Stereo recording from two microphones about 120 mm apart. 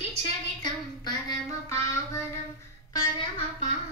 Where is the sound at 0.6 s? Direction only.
35° left (ahead or behind).